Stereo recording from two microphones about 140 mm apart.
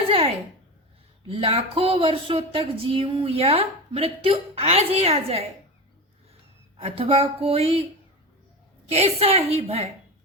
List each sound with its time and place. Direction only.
0.1 s a sound: 45° right (ahead or behind)
1.3 s speech: 40° right (ahead or behind)
6.7 s speech: 40° right (ahead or behind)
8.9 s speech: 50° right (ahead or behind)